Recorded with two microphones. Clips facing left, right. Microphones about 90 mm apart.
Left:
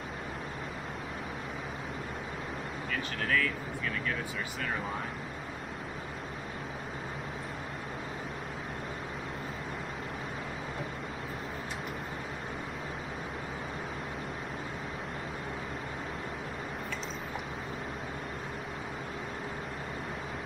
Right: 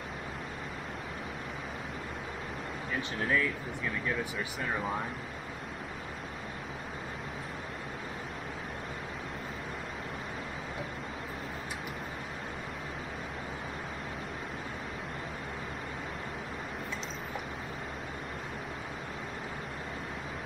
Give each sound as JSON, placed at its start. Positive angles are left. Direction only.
{"t": 2.9, "sound": "speech", "side_deg": -20}